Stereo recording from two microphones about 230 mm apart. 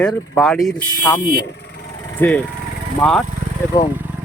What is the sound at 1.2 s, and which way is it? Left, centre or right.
Speech, left.